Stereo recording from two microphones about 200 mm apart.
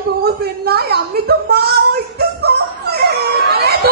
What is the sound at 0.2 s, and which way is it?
A woman's voice, 50° right (ahead or behind).